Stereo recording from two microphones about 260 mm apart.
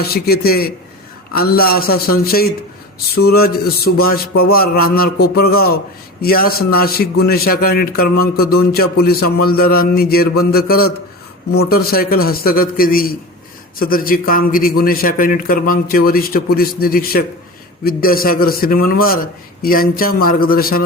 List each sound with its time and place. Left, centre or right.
0.0 s a man's voice: left